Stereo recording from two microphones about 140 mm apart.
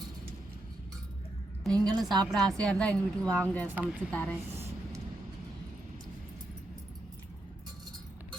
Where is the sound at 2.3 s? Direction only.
5° left (ahead or behind).